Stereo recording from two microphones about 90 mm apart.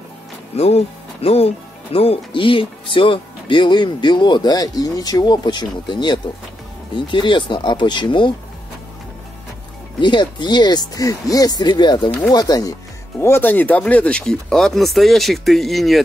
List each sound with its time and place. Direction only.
1.2 s speech: 90° left; by 8.3 s 60° left (ahead or behind)
9.9 s speech: 60° left (ahead or behind)
12.2 s speech: 45° left (ahead or behind)
13.2 s speech: 25° left (ahead or behind); by 16.0 s centre (ahead or behind)